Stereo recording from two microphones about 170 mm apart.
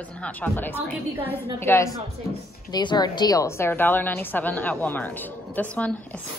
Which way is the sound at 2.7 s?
25° left (ahead or behind).